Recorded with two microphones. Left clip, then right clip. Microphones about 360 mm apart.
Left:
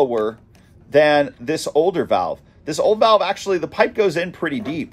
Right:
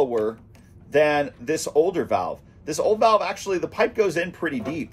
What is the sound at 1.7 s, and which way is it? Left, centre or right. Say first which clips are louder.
Speech: left 4 dB; left.